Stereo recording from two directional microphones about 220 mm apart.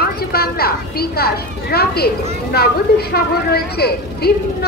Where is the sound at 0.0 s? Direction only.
45° left (ahead or behind).